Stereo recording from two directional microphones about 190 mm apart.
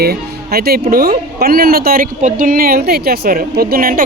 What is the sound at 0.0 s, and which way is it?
Speech, 55° right (ahead or behind).